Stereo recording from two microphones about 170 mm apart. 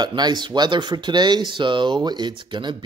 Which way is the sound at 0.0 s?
25° right (ahead or behind).